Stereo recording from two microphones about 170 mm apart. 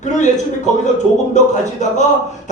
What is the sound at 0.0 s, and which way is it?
Speech, 45° left (ahead or behind).